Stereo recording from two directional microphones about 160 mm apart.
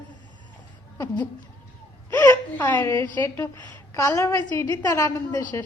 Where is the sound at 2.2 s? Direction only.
15° left (ahead or behind).